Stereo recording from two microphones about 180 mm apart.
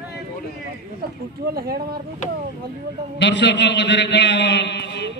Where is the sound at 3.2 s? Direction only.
80° left.